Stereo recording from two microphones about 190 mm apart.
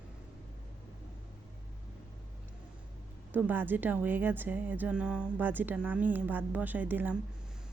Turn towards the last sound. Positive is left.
turn(degrees=-10)  # may be behind; listen again after turning